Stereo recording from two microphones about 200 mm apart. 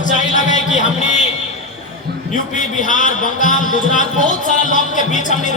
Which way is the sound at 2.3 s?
40° left (ahead or behind).